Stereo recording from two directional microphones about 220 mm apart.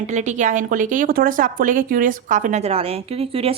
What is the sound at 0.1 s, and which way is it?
A woman's voice, 30° right (ahead or behind).